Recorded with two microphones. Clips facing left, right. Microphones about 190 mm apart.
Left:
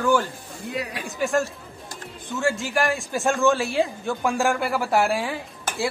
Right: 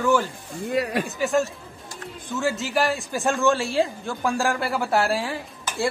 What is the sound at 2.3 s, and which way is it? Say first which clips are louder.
Speech: even; centre (ahead or behind).